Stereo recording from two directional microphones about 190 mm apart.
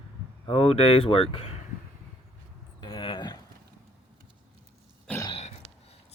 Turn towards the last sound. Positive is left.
turn(degrees=15)  # may be behind; listen again after turning